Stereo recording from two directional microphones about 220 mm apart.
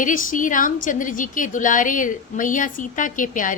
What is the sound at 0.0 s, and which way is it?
A woman's voice, 35° left (ahead or behind).